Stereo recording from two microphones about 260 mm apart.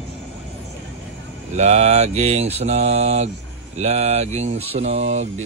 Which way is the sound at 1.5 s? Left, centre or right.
Right.